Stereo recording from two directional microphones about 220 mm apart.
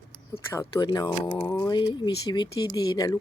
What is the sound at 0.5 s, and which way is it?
Speech, 20° left (ahead or behind).